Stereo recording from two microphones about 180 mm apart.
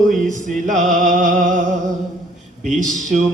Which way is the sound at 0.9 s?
45° right (ahead or behind).